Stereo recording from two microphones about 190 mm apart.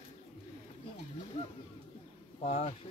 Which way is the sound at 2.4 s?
35° left (ahead or behind).